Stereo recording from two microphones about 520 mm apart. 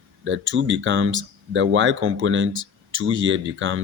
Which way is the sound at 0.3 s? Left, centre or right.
Right.